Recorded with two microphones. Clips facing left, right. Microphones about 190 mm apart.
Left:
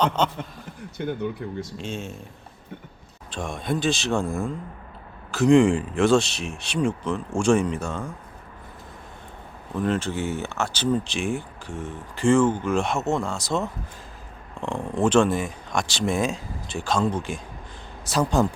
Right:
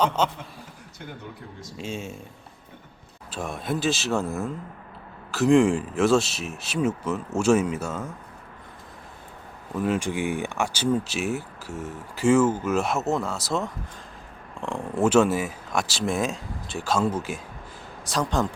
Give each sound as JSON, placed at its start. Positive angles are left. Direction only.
{"t": 0.2, "sound": "speech", "side_deg": -5}
{"t": 0.9, "sound": "speech", "side_deg": 65}
{"t": 1.8, "sound": "speech", "side_deg": -5}
{"t": 3.3, "sound": "speech", "side_deg": -5}
{"t": 9.7, "sound": "speech", "side_deg": -10}
{"t": 18.0, "sound": "speech", "side_deg": 5}